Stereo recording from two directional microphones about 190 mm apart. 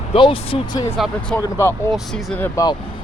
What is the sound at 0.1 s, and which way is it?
Speech, 25° left (ahead or behind).